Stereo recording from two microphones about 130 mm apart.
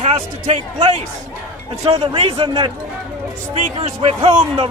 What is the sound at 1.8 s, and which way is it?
Speech, 45° right (ahead or behind).